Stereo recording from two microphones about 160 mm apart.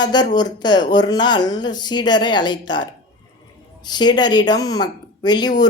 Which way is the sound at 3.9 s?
25° left (ahead or behind).